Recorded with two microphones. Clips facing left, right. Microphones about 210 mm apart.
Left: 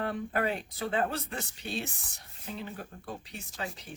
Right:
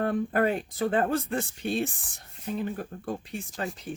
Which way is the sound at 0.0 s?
50° right (ahead or behind).